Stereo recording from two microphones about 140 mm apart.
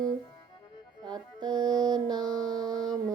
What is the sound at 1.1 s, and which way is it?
Music, 30° right (ahead or behind).